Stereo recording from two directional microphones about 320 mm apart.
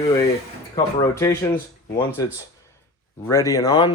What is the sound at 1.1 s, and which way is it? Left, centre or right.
Speech, centre.